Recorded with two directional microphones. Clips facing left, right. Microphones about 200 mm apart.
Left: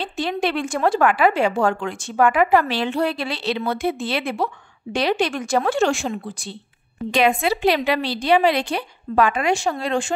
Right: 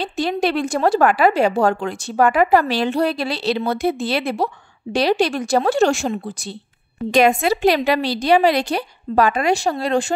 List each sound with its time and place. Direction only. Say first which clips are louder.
0.0 s speech: right 3 dB; 40° right (ahead or behind)